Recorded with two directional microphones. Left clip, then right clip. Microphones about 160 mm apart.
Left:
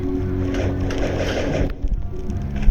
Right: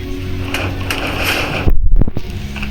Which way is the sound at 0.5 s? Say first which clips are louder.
Right 9 dB; 70° right (ahead or behind).